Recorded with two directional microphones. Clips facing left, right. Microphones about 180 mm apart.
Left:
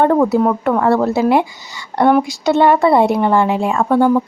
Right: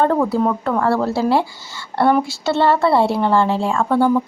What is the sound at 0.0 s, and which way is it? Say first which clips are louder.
Speech: left 4 dB; 15° left (ahead or behind).